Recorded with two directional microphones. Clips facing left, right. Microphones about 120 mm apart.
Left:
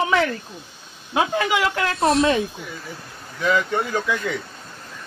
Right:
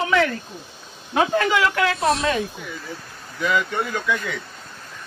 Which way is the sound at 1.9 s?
Centre (ahead or behind).